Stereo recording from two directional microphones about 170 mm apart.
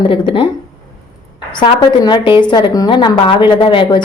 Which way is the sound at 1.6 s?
25° left (ahead or behind).